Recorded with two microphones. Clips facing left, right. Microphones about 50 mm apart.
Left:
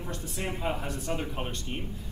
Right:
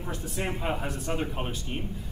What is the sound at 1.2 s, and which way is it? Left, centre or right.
Speech, centre.